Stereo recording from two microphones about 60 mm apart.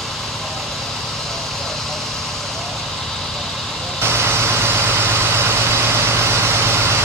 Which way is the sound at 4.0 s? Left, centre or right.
Right.